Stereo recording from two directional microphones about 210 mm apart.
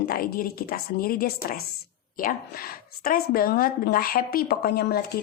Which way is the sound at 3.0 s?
45° left (ahead or behind).